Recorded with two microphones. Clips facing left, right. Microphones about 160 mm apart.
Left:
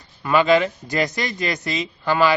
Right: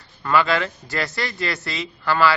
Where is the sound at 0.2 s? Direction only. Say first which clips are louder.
Left 4 dB; 15° left (ahead or behind).